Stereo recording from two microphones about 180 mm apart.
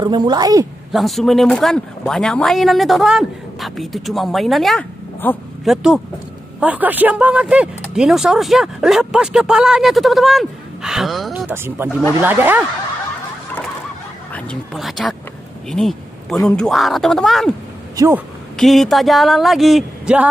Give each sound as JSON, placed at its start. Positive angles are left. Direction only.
{"t": 0.0, "sound": "a woman's voice", "side_deg": -20}
{"t": 0.9, "sound": "speech", "side_deg": 0}
{"t": 5.7, "sound": "speech", "side_deg": -5}
{"t": 14.3, "sound": "speech", "side_deg": 0}
{"t": 17.9, "sound": "speech", "side_deg": -15}
{"t": 18.6, "sound": "speech", "side_deg": 0}